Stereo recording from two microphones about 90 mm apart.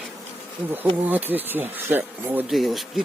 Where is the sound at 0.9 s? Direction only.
20° right (ahead or behind).